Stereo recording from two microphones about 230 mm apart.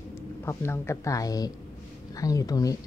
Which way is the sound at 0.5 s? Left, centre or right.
Centre.